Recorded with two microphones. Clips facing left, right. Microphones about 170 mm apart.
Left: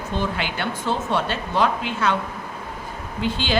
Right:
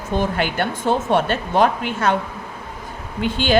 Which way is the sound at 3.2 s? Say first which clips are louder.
Right 4 dB; 50° right (ahead or behind).